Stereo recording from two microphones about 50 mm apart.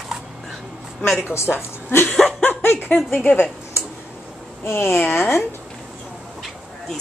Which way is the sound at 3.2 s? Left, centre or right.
Left.